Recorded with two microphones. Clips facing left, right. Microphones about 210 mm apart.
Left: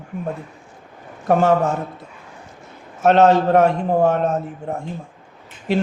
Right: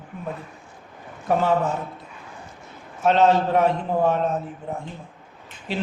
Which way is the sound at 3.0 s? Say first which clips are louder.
Left 4 dB; 50° left (ahead or behind).